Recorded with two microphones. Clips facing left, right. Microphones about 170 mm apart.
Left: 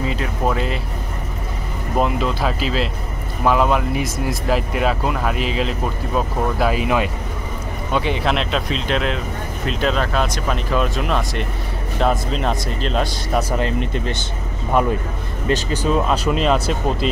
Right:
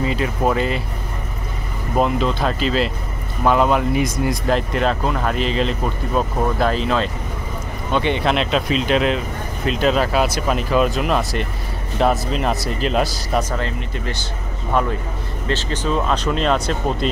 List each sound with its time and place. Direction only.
0.0 s speech: centre (ahead or behind)
2.0 s speech: centre (ahead or behind)
13.4 s speech: 15° left (ahead or behind)
15.4 s speech: 10° left (ahead or behind)